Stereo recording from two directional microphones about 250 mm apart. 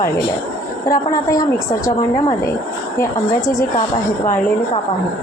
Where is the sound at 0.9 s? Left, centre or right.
Centre.